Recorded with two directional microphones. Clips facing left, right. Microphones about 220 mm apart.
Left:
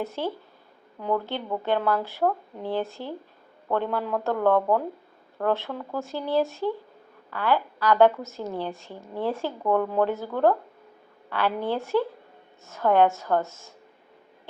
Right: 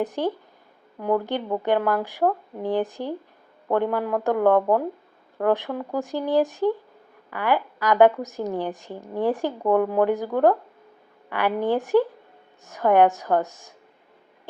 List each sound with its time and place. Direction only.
0.0 s a woman's voice: 15° right (ahead or behind)